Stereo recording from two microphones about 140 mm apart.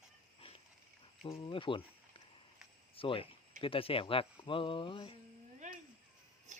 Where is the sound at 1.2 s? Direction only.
40° left (ahead or behind).